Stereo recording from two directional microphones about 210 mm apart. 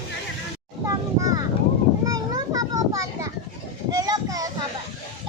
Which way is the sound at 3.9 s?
20° right (ahead or behind).